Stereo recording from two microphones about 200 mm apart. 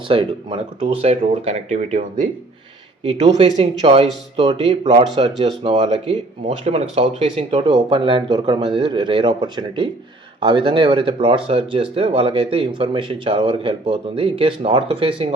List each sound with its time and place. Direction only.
0.1 s speech: 25° right (ahead or behind)
3.2 s speech: 30° right (ahead or behind)